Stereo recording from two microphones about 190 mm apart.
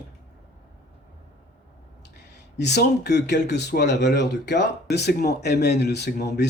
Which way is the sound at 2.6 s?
60° left (ahead or behind).